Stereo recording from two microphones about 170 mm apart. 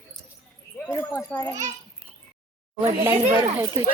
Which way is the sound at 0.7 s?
10° left (ahead or behind).